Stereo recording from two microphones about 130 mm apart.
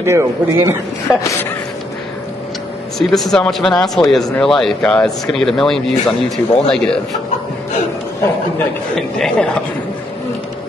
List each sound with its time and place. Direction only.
0.0 s a man's voice: 20° right (ahead or behind)
3.0 s speech: centre (ahead or behind)
8.9 s speech: 5° left (ahead or behind)